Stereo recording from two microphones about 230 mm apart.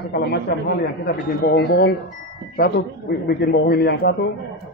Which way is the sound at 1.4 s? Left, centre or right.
Left.